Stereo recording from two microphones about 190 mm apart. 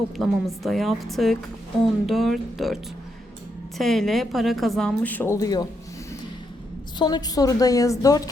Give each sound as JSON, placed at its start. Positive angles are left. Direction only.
{"t": 0.2, "sound": "a woman's voice", "side_deg": 0}
{"t": 3.8, "sound": "a woman's voice", "side_deg": 0}
{"t": 7.0, "sound": "a woman's voice", "side_deg": 20}